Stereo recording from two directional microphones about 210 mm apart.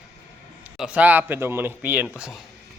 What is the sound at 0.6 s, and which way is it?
A man's voice, 5° right (ahead or behind).